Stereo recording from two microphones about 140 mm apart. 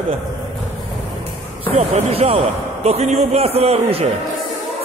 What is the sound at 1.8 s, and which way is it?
A man's voice, 50° right (ahead or behind).